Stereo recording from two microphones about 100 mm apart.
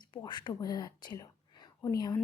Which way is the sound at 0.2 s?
50° left (ahead or behind).